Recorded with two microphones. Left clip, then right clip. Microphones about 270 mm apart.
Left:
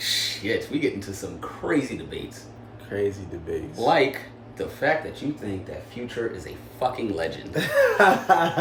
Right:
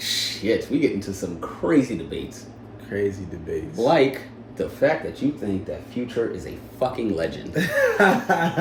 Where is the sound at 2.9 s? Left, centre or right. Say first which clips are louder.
Right 1 dB; centre.